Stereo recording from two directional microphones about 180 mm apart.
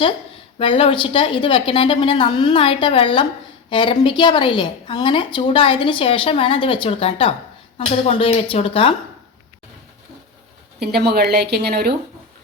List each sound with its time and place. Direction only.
0.6 s a woman's voice: 30° left (ahead or behind)
10.8 s a woman's voice: 65° right (ahead or behind)